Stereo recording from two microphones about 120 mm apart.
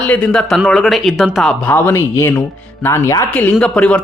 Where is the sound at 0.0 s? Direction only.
10° left (ahead or behind).